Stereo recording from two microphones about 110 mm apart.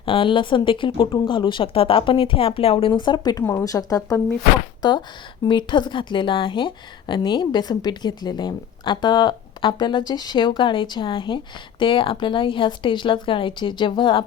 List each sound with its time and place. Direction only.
0.0 s a woman's voice: 55° left (ahead or behind)
3.4 s a woman's voice: 30° left (ahead or behind); by 14.3 s 50° left (ahead or behind)